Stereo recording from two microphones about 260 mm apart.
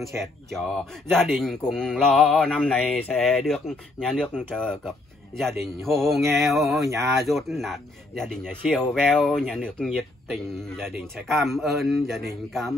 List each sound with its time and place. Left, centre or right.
0.2 s speech: centre
6.8 s speech: centre
7.2 s speech: centre